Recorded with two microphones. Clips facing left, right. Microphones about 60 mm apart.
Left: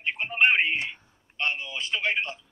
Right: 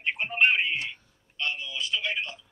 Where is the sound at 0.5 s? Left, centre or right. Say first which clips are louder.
Left 3 dB; left.